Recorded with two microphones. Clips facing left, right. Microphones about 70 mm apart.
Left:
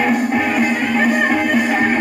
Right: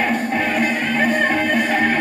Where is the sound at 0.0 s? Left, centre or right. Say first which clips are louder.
Left 3 dB; centre.